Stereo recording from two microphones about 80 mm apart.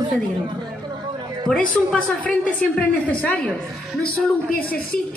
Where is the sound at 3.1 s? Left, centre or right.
Centre.